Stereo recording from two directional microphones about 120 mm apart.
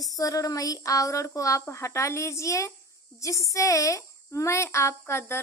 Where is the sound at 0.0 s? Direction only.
30° left (ahead or behind).